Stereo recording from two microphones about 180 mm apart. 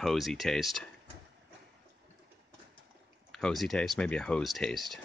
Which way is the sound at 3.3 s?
5° left (ahead or behind).